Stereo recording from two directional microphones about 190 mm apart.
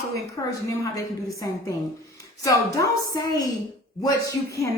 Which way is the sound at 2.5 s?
15° left (ahead or behind).